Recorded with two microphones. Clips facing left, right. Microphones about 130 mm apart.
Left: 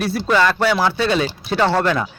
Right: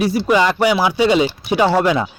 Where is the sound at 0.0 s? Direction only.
15° right (ahead or behind).